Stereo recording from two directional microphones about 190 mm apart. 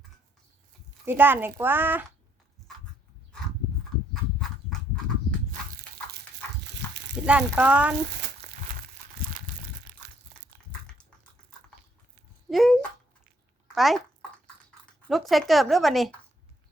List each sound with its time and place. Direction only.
1.0 s speech: 10° right (ahead or behind)
6.7 s a sound: 65° right (ahead or behind)
7.3 s speech: 5° right (ahead or behind)
8.4 s crumpling: 40° right (ahead or behind)
12.5 s speech: centre (ahead or behind)
13.7 s a sound: centre (ahead or behind)
15.0 s speech: centre (ahead or behind)